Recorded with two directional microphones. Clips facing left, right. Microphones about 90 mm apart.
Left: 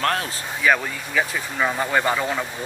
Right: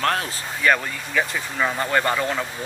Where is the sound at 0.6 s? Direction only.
5° left (ahead or behind).